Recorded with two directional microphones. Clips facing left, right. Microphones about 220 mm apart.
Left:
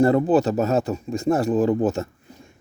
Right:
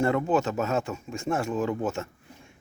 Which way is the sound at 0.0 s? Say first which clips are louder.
Left 7 dB; 35° left (ahead or behind).